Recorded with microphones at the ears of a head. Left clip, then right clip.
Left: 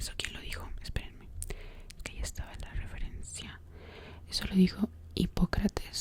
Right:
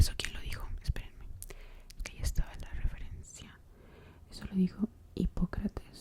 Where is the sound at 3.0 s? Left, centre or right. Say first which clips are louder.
Left 7 dB; left.